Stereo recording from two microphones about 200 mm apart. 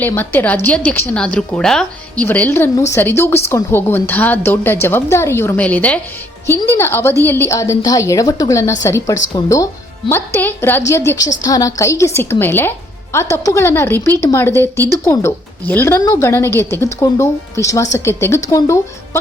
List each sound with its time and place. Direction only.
0.0 s a woman's voice: 10° left (ahead or behind)